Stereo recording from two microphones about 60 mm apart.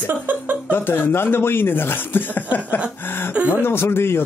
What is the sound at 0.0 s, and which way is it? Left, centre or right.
Speech, right.